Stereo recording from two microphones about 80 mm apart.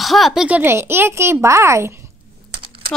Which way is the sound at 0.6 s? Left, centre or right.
Right.